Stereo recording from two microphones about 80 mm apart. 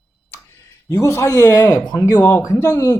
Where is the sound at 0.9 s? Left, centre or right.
Left.